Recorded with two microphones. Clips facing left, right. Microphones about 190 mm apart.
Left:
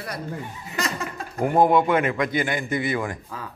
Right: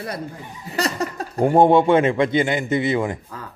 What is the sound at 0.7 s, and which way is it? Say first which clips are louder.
Speech: right 6 dB; 35° right (ahead or behind).